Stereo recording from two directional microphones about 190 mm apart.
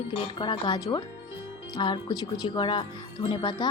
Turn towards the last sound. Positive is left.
turn(degrees=25)  # may be behind; listen again after turning